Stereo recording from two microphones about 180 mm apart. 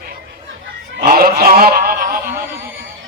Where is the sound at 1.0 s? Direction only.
55° right (ahead or behind).